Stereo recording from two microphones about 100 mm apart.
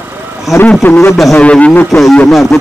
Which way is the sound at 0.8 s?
25° left (ahead or behind).